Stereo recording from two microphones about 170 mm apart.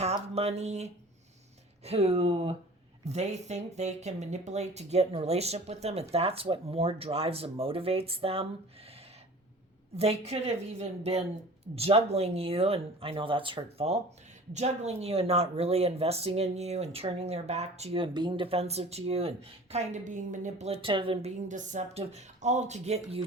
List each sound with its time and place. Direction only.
0.0 s speech: 40° right (ahead or behind)
9.9 s speech: 40° right (ahead or behind)